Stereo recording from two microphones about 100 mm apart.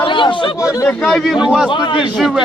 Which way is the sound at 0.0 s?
55° left (ahead or behind).